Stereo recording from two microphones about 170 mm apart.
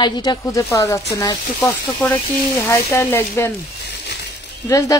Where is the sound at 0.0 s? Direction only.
25° left (ahead or behind).